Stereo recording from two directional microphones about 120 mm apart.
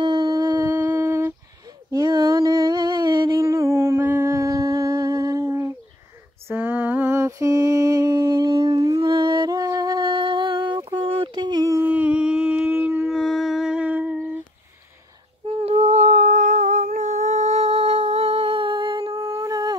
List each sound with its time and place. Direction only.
0.0 s howl: 35° right (ahead or behind)
0.7 s a sound: 25° right (ahead or behind); by 3.3 s 40° right (ahead or behind)
3.3 s humming: 25° right (ahead or behind)
6.5 s mantra: 15° right (ahead or behind); by 8.8 s 40° right (ahead or behind)
8.8 s humming: 30° right (ahead or behind)
9.1 s a sound: 40° right (ahead or behind)
9.6 s a sound: 30° right (ahead or behind)
11.8 s howl: 10° right (ahead or behind)
13.1 s humming: centre (ahead or behind)
15.6 s humming: 60° right (ahead or behind); by 19.1 s 45° right (ahead or behind)
19.3 s humming: 30° right (ahead or behind)